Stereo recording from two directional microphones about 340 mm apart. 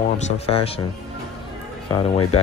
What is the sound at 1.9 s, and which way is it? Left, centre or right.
Speech, centre.